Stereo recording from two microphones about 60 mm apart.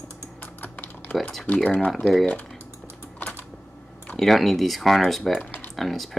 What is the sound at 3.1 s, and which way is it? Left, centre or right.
Typing, left.